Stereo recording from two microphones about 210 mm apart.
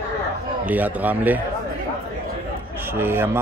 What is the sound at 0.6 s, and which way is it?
Speech, 10° right (ahead or behind).